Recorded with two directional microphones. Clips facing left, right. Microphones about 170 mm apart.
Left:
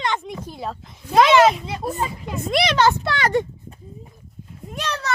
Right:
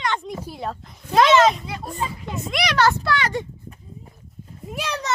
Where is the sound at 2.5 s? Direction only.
30° left (ahead or behind).